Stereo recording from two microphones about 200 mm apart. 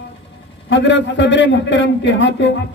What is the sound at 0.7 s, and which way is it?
A man's voice, 60° left (ahead or behind).